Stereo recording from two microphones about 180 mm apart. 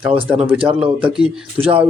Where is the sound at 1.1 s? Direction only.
5° right (ahead or behind).